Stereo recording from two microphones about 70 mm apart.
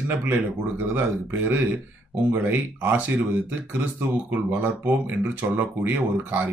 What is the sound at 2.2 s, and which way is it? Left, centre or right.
Speech, right.